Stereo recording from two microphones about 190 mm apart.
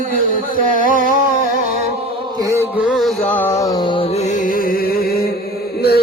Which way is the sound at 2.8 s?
Centre (ahead or behind).